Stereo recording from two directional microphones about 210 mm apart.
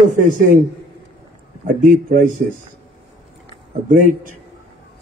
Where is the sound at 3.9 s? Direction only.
35° right (ahead or behind).